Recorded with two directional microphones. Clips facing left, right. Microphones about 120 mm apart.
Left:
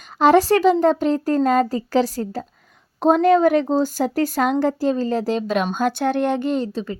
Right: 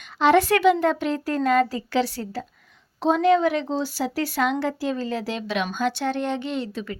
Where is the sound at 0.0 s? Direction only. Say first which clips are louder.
Left 4 dB; 40° left (ahead or behind).